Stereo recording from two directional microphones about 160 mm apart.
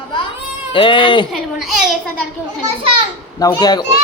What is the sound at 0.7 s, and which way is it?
Speech, 30° left (ahead or behind).